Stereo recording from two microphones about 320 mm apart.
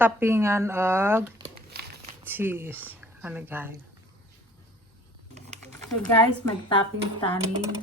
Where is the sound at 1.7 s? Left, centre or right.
Right.